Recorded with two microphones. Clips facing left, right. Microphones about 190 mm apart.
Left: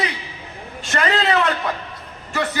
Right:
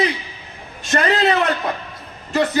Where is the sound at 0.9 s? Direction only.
35° right (ahead or behind).